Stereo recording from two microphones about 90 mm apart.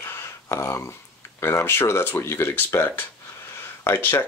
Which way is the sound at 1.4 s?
30° left (ahead or behind).